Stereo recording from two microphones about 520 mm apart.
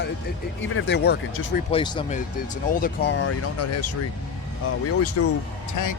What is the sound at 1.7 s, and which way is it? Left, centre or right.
Speech, centre.